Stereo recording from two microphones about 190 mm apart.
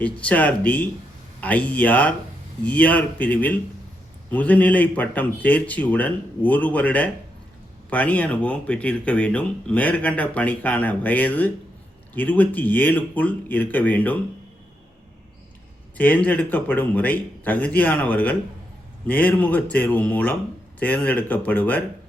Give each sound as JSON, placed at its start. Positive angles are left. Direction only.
{"t": 0.0, "sound": "speech", "side_deg": 5}
{"t": 16.0, "sound": "speech", "side_deg": 10}